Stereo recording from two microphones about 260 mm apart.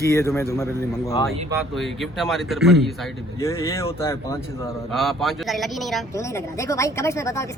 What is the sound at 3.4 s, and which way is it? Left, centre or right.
Speech, centre.